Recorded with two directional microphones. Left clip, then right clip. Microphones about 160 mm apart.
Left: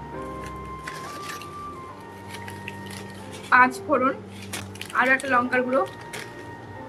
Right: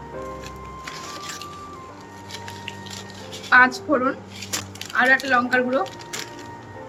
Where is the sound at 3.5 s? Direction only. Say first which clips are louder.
Right 2 dB; 10° left (ahead or behind).